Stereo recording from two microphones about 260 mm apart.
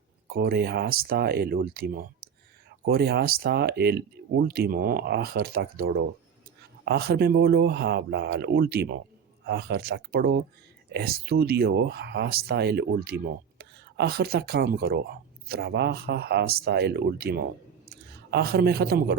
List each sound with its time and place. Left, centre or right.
0.3 s speech: right